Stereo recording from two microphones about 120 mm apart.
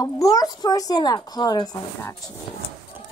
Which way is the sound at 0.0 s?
30° left (ahead or behind).